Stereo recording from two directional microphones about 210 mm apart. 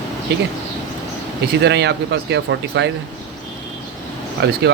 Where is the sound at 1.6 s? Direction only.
55° right (ahead or behind).